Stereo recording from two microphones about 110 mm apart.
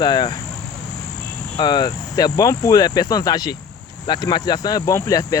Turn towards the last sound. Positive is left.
turn(degrees=30)  # may be behind; listen again after turning